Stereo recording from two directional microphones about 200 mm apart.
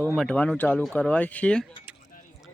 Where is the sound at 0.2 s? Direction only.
5° left (ahead or behind).